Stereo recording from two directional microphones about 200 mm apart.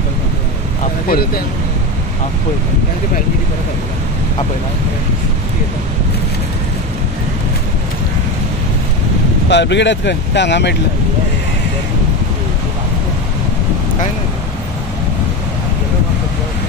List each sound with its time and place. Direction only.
9.5 s speech: 60° left (ahead or behind)